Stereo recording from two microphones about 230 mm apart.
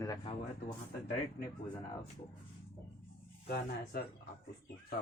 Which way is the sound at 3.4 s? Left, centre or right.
Left.